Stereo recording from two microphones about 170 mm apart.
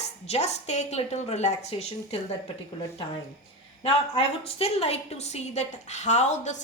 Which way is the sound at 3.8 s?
35° left (ahead or behind).